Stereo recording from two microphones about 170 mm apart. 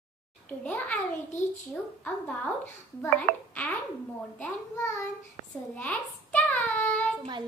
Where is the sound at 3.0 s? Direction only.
10° left (ahead or behind).